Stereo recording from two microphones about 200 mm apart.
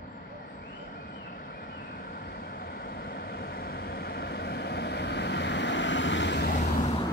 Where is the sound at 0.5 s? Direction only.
45° left (ahead or behind).